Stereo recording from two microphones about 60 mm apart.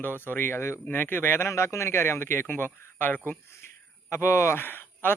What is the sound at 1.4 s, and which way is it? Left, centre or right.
A man's voice, left.